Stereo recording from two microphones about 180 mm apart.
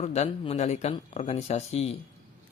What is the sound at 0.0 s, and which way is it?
Speech, 35° left (ahead or behind).